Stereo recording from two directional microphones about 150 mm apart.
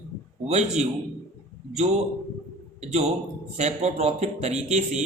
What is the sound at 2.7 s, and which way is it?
A man's voice, 45° right (ahead or behind).